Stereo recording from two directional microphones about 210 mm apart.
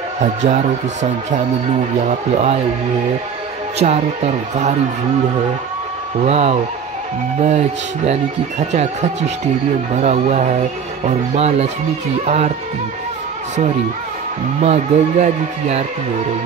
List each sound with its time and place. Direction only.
0.2 s speech: 35° right (ahead or behind)
2.0 s speech: 30° right (ahead or behind)
3.8 s speech: 30° right (ahead or behind)
6.2 s speech: 30° right (ahead or behind)
14.6 s speech: 35° right (ahead or behind)